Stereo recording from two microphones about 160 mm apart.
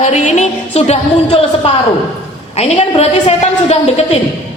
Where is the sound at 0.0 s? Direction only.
45° left (ahead or behind).